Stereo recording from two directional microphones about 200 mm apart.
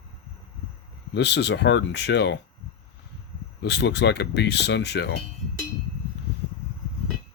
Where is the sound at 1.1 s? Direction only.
60° left (ahead or behind).